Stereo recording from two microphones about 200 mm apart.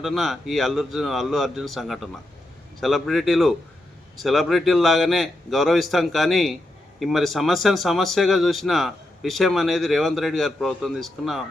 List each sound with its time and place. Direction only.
0.0 s speech: centre (ahead or behind)